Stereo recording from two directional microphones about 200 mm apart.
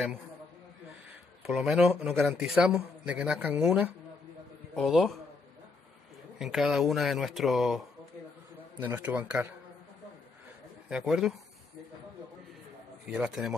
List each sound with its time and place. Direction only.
1.4 s speech: centre (ahead or behind)
6.3 s speech: centre (ahead or behind)
10.9 s speech: centre (ahead or behind)
13.0 s speech: 5° right (ahead or behind)